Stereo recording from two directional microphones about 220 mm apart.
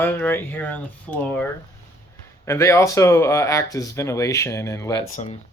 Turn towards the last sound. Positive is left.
turn(degrees=30)  # may be behind; listen again after turning